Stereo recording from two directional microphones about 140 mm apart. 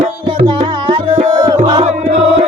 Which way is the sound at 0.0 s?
35° right (ahead or behind).